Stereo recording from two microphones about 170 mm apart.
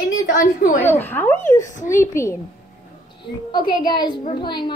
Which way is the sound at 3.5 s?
25° left (ahead or behind).